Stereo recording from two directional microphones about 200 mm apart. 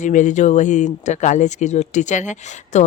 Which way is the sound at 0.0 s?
40° left (ahead or behind).